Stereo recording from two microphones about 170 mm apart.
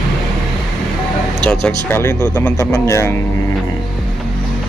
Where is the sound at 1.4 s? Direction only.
5° left (ahead or behind).